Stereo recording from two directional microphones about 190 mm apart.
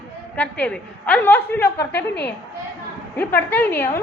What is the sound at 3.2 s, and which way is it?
Speech, 10° left (ahead or behind).